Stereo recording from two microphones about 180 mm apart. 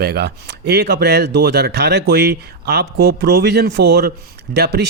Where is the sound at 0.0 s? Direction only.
60° right (ahead or behind).